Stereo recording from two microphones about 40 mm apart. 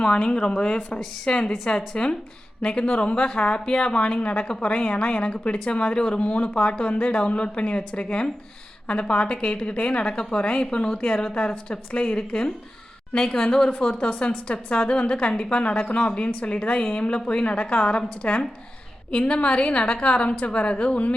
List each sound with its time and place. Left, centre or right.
0.0 s a woman's voice: left
13.1 s speech: centre
13.5 s a woman's voice: left
17.2 s a woman's voice: left